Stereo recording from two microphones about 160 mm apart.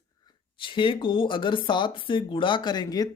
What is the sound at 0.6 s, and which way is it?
Speech, 30° left (ahead or behind).